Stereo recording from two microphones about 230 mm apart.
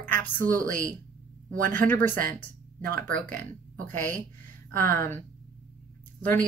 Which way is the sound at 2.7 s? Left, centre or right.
Right.